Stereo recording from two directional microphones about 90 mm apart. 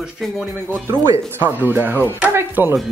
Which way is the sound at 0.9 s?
25° right (ahead or behind).